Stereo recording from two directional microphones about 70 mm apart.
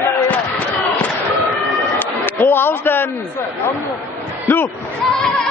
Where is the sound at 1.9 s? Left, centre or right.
Left.